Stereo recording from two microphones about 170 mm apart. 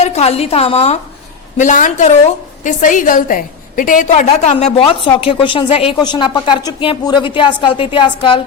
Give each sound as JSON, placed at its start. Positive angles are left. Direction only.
{"t": 0.0, "sound": "a woman's voice", "side_deg": 40}
{"t": 1.5, "sound": "a woman's voice", "side_deg": 45}